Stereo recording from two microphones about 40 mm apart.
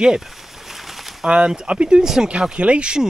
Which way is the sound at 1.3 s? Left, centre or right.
Centre.